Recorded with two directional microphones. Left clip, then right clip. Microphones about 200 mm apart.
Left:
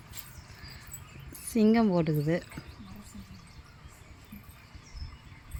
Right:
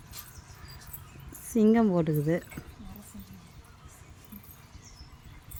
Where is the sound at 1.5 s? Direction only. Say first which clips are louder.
Right 1 dB; 10° right (ahead or behind).